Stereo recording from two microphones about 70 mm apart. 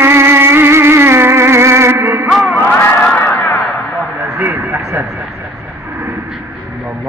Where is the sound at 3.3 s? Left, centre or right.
Left.